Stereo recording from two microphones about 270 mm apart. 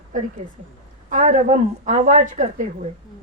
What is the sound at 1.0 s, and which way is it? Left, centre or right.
Speech, right.